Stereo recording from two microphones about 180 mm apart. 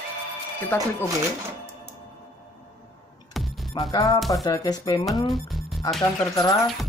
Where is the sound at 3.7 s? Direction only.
25° left (ahead or behind).